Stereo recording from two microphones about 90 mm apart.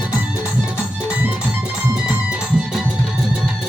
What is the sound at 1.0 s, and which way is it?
Music, 15° right (ahead or behind).